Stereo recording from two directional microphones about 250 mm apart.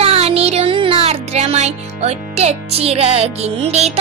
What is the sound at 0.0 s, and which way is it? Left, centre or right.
Music, right.